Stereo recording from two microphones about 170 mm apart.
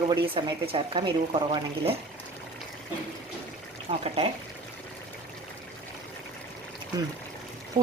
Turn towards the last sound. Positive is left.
turn(degrees=-45)  # may be behind; listen again after turning